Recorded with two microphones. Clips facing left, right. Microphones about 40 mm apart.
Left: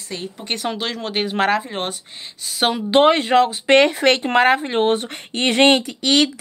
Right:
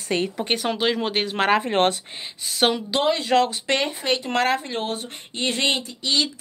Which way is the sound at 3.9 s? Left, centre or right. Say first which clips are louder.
Left 8 dB; left.